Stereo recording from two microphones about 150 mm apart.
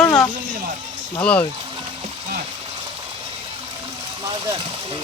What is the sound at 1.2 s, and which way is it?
Speech, 10° left (ahead or behind).